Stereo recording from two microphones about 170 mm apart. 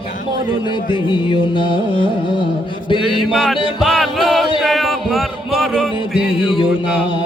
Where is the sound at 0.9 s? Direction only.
30° left (ahead or behind).